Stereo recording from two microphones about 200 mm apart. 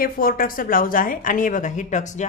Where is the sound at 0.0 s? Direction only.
45° left (ahead or behind).